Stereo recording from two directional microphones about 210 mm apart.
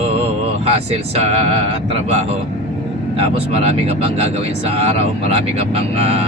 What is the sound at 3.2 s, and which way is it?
Speech, 30° right (ahead or behind).